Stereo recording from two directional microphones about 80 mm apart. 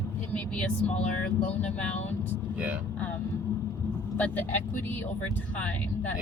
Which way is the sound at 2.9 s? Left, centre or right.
Left.